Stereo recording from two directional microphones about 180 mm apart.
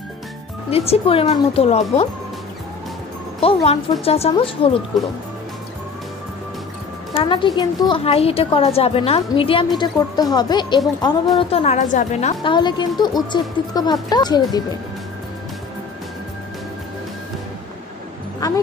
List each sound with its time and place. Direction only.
0.7 s speech: 35° left (ahead or behind)
3.3 s speech: 35° left (ahead or behind)
7.2 s a woman's voice: 25° left (ahead or behind)
11.3 s speech: 35° left (ahead or behind)
12.4 s a woman's voice: 25° left (ahead or behind)